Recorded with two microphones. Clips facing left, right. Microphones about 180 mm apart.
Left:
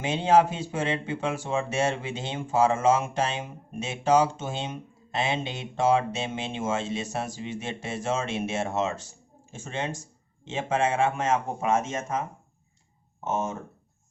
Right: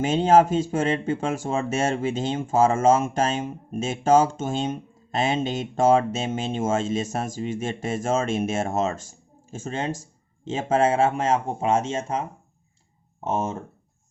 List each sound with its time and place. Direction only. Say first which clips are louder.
0.0 s speech: right 4 dB; 45° right (ahead or behind)
13.2 s speech: right 3 dB; 30° right (ahead or behind)